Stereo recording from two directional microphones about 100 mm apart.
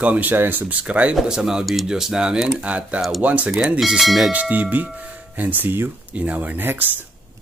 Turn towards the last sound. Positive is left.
turn(degrees=-20)  # may be behind; listen again after turning